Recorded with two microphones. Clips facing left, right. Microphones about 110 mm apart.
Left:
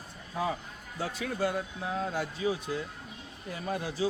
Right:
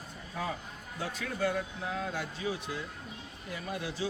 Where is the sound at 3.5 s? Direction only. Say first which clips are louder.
Left 3 dB; 30° left (ahead or behind).